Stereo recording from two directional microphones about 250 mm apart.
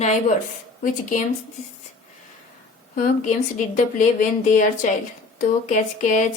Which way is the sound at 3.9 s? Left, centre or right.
Left.